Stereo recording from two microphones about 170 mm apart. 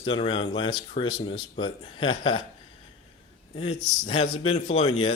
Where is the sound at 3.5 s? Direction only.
30° left (ahead or behind).